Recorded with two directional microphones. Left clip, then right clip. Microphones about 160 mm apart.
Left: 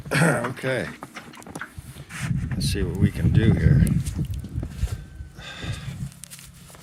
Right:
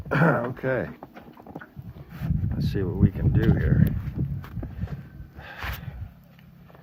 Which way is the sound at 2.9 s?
10° right (ahead or behind).